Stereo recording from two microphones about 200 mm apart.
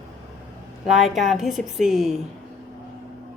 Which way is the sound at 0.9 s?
Centre (ahead or behind).